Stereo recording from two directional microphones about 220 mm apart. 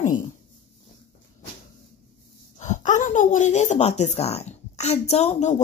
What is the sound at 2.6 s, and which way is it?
Speech, 35° left (ahead or behind).